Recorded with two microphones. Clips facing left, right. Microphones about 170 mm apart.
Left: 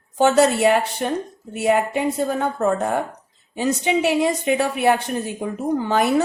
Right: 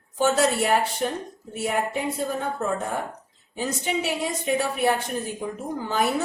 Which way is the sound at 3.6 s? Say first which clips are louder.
Left 7 dB; 75° left (ahead or behind).